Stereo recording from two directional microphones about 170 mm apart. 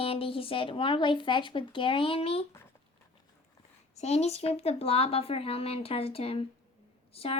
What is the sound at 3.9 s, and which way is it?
A woman's voice, 40° left (ahead or behind).